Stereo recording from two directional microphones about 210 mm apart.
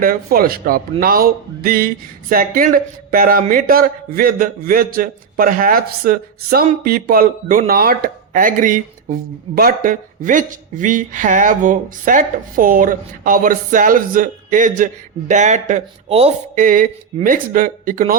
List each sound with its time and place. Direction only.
0.0 s a man's voice: 45° right (ahead or behind)